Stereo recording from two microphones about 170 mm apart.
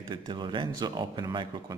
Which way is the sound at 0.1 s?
30° right (ahead or behind).